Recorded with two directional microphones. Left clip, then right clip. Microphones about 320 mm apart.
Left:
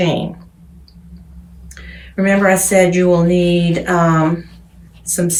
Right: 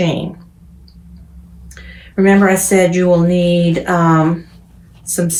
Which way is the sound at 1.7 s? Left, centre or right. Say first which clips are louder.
Right 4 dB; centre.